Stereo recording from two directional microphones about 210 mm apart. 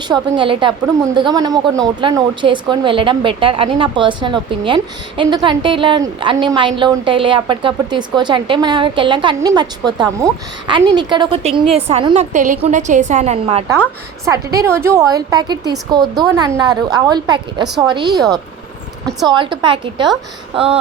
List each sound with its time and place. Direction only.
0.1 s a woman's voice: 25° right (ahead or behind)
14.3 s a woman's voice: 15° right (ahead or behind)
19.3 s a woman's voice: 25° right (ahead or behind)